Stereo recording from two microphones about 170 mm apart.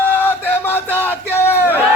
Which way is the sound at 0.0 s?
10° left (ahead or behind).